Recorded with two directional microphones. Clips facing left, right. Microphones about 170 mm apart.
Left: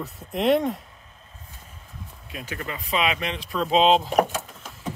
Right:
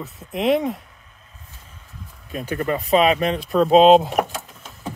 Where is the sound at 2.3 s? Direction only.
45° right (ahead or behind).